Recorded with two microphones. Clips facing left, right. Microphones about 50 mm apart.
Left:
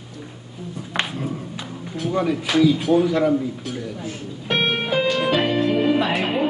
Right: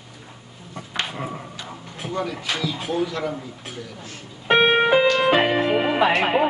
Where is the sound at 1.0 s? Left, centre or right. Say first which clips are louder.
Left 3 dB; centre.